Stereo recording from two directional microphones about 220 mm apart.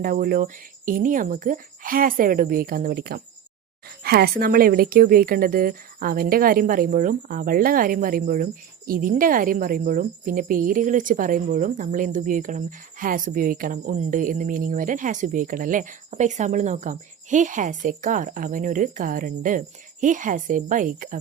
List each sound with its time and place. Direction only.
0.0 s a woman's voice: 40° right (ahead or behind)